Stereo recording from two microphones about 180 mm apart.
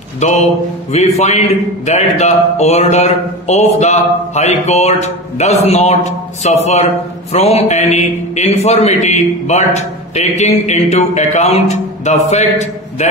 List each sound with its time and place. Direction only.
0.2 s a man's voice: 40° left (ahead or behind)